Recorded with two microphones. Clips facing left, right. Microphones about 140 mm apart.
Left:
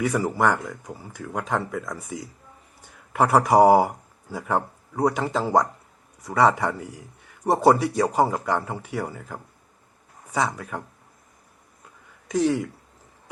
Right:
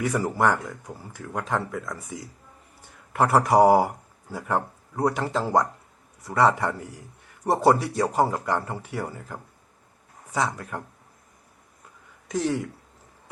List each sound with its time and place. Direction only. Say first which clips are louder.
0.1 s speech: left 1 dB; 5° left (ahead or behind)
7.5 s speech: left 2 dB; 20° left (ahead or behind)
7.9 s speech: left 2 dB; centre (ahead or behind)
10.6 s speech: left 1 dB; 5° left (ahead or behind)
12.3 s speech: left 4 dB; 5° left (ahead or behind)